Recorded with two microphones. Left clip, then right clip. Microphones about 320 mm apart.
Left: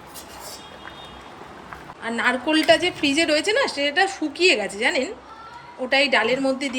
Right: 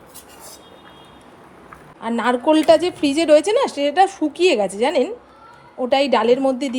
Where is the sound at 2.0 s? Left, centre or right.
Centre.